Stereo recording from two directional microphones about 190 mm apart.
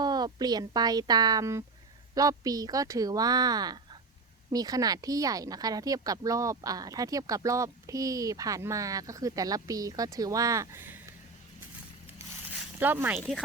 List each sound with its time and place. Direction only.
0.0 s speech: 20° right (ahead or behind)
12.8 s speech: 10° right (ahead or behind)
13.1 s speech: centre (ahead or behind)